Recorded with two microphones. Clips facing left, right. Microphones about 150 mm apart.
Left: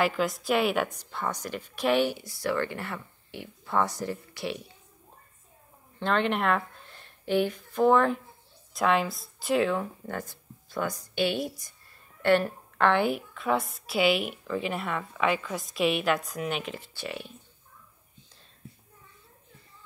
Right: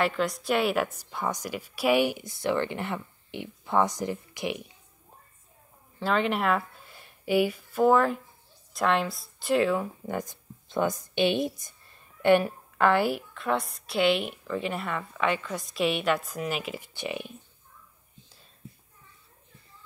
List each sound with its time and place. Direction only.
0.0 s a woman's voice: centre (ahead or behind); by 4.6 s 15° right (ahead or behind)
5.9 s a woman's voice: 5° right (ahead or behind)
10.0 s a woman's voice: 15° right (ahead or behind)